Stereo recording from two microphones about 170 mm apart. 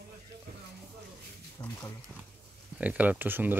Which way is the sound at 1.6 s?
20° left (ahead or behind).